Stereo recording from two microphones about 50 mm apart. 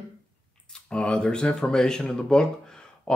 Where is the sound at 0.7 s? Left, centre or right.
Centre.